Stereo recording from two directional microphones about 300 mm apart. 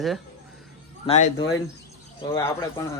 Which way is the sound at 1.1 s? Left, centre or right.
Left.